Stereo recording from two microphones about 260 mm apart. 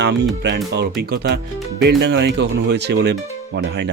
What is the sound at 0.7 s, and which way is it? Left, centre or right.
Speech, right.